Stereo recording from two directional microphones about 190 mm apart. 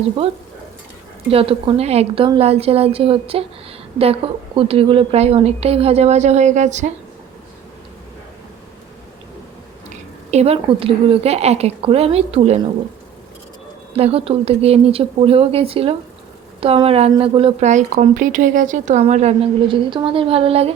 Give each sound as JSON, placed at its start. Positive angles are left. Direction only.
{"t": 1.3, "sound": "a woman's voice", "side_deg": -30}
{"t": 10.3, "sound": "a woman's voice", "side_deg": -30}
{"t": 13.9, "sound": "a woman's voice", "side_deg": -30}